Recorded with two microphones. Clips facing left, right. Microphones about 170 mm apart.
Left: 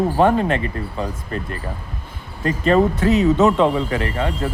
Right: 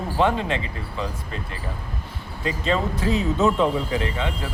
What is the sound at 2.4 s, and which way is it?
Speech, 55° left (ahead or behind).